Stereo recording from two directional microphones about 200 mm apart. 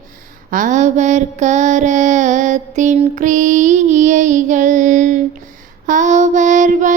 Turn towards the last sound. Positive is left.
turn(degrees=-40)  # may be behind; listen again after turning